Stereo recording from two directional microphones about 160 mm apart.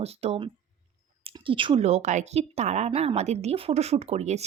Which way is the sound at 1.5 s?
30° right (ahead or behind).